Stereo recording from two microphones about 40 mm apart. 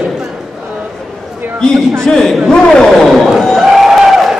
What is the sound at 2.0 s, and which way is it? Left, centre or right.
A man's voice, centre.